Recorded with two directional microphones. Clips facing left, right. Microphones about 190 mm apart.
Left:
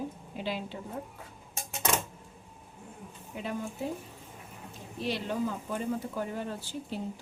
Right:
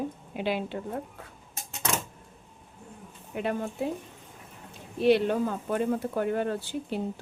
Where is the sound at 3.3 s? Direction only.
60° right (ahead or behind).